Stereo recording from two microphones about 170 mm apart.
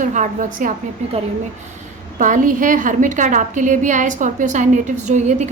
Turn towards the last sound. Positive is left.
turn(degrees=-45)  # may be behind; listen again after turning